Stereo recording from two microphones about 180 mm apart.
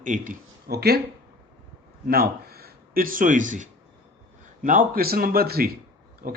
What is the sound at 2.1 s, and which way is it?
Speech, 60° right (ahead or behind).